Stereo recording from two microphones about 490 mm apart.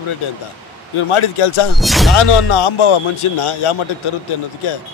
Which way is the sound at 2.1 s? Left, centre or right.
Left.